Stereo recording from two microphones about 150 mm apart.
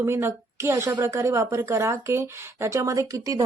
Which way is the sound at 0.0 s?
15° right (ahead or behind).